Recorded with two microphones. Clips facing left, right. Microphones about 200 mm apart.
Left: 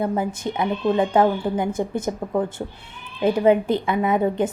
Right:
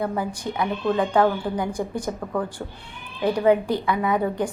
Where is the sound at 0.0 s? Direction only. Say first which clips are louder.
Left 3 dB; 20° left (ahead or behind).